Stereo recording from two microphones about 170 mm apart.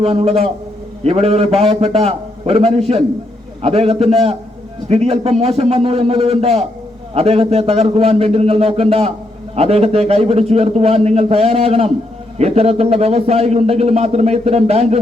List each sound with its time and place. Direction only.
0.0 s a man's voice: 35° right (ahead or behind)